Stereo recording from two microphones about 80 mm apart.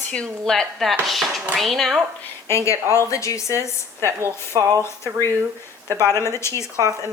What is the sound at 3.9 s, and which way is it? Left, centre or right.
Speech, right.